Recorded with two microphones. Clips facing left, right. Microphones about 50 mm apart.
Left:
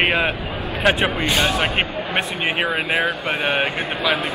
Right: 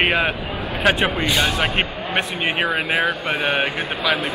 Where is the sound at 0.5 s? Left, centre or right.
Right.